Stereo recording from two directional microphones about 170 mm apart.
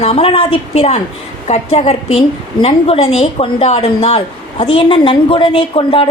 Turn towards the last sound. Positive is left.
turn(degrees=30)  # may be behind; listen again after turning